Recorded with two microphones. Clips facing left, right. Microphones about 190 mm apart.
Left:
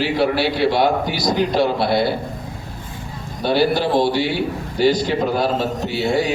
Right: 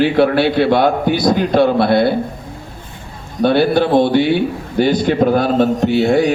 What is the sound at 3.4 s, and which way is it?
A man's voice, 55° right (ahead or behind).